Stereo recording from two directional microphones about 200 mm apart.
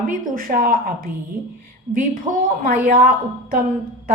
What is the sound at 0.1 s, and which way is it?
A woman's voice, 45° right (ahead or behind).